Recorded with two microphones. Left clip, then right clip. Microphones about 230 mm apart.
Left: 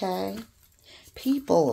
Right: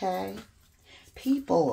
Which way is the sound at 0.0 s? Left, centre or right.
Left.